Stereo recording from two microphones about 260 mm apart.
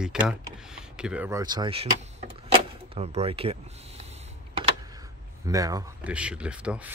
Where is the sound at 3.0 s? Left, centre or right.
Right.